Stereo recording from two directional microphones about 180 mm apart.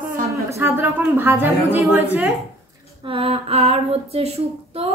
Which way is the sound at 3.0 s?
30° right (ahead or behind).